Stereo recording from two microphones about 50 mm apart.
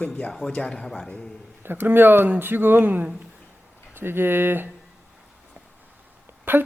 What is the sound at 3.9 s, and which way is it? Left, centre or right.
Speech, right.